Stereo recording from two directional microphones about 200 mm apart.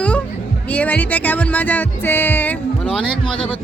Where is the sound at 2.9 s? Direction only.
25° left (ahead or behind).